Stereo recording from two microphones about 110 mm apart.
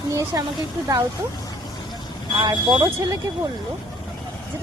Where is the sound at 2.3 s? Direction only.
35° right (ahead or behind).